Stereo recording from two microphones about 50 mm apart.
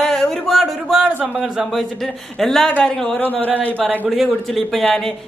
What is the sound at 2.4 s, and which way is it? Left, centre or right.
Speech, centre.